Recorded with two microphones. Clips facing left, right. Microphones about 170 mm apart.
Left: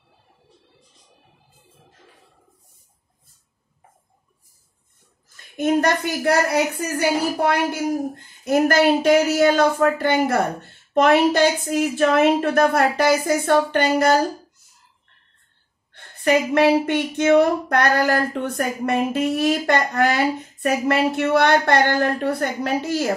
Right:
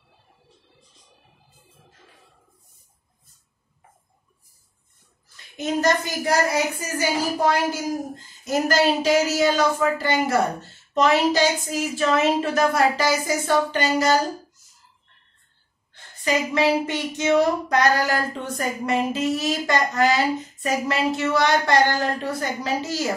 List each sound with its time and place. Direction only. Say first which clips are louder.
5.3 s a woman's voice: left 6 dB; 55° left (ahead or behind)
15.9 s a woman's voice: left 5 dB; 60° left (ahead or behind)